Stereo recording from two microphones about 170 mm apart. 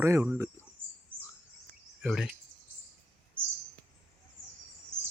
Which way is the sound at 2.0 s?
5° right (ahead or behind).